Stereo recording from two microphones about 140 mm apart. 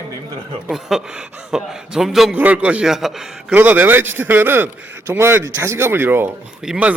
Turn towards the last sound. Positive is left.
turn(degrees=-5)  # may be behind; listen again after turning